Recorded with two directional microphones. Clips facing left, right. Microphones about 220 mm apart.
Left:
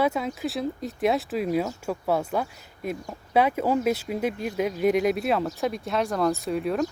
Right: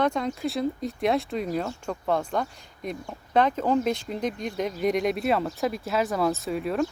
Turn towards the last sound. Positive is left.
turn(degrees=0)  # may be behind; listen again after turning